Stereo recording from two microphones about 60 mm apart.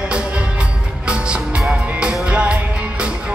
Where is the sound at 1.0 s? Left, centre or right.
Centre.